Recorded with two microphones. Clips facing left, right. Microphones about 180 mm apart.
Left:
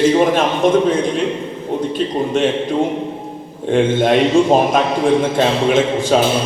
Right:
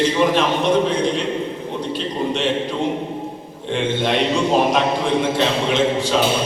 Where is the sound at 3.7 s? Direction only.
50° left (ahead or behind).